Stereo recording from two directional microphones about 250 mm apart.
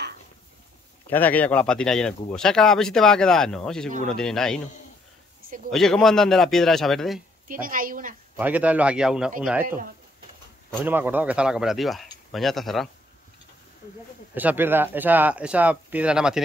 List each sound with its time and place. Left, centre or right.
1.1 s speech: centre
5.7 s speech: centre
7.6 s speech: right
8.4 s speech: centre
10.8 s speech: centre
14.3 s speech: centre